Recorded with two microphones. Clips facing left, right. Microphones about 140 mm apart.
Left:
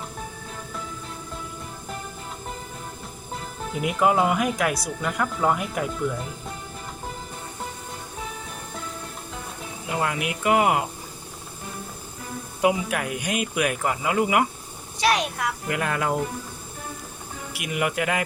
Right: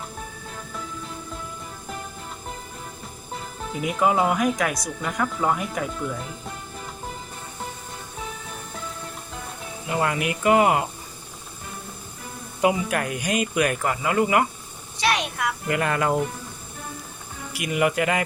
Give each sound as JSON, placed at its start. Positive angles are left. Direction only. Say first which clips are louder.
{"t": 3.7, "sound": "speech", "louder": "left 1 dB", "side_deg": 0}
{"t": 10.0, "sound": "speech", "louder": "right 3 dB", "side_deg": 5}
{"t": 12.6, "sound": "speech", "louder": "right 1 dB", "side_deg": 5}
{"t": 15.0, "sound": "a sound", "louder": "left 2 dB", "side_deg": 40}
{"t": 15.7, "sound": "speech", "louder": "right 3 dB", "side_deg": 0}
{"t": 17.5, "sound": "speech", "louder": "right 4 dB", "side_deg": 5}